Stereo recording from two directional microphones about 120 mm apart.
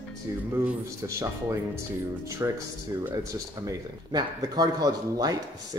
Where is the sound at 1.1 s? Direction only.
25° right (ahead or behind).